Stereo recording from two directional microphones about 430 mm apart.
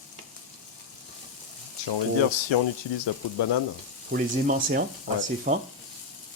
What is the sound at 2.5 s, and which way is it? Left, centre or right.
Speech, left.